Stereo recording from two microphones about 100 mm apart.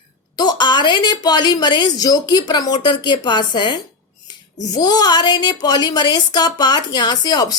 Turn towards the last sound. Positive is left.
turn(degrees=45)  # may be behind; listen again after turning